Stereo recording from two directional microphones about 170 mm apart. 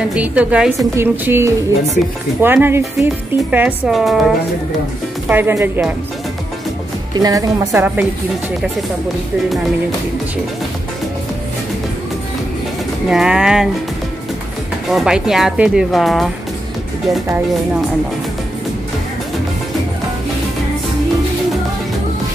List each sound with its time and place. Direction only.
0.0 s a woman's voice: 5° right (ahead or behind)
5.3 s a woman's voice: 15° right (ahead or behind)
7.2 s speech: 20° right (ahead or behind)
7.8 s a woman's voice: 10° right (ahead or behind)
13.1 s speech: 5° right (ahead or behind)
14.9 s speech: 5° right (ahead or behind)